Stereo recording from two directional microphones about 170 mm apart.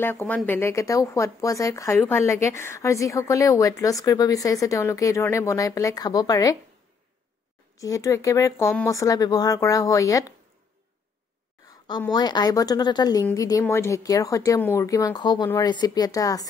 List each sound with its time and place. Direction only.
0.0 s speech: 10° left (ahead or behind)
7.7 s speech: 20° left (ahead or behind)
12.1 s speech: 25° left (ahead or behind)